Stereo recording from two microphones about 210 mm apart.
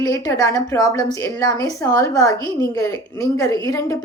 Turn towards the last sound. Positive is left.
turn(degrees=15)  # may be behind; listen again after turning